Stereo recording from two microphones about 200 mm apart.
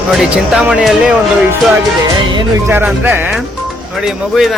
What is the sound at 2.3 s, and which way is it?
Music, 20° right (ahead or behind).